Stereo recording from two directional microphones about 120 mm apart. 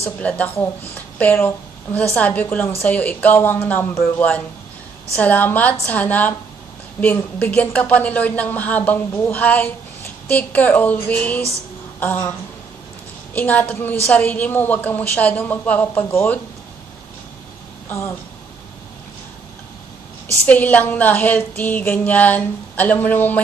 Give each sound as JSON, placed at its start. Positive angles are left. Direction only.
{"t": 0.2, "sound": "speech", "side_deg": 10}
{"t": 17.8, "sound": "speech", "side_deg": 15}
{"t": 20.4, "sound": "speech", "side_deg": 15}